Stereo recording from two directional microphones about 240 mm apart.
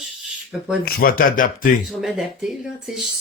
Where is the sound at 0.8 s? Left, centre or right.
Left.